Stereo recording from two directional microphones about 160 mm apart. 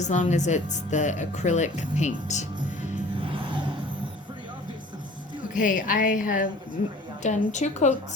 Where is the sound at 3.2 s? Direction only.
30° right (ahead or behind).